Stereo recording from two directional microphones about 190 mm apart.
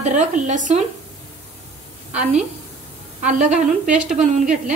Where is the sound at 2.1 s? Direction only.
35° right (ahead or behind).